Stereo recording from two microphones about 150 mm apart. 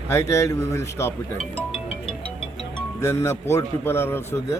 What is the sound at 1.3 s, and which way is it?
Music, 40° left (ahead or behind).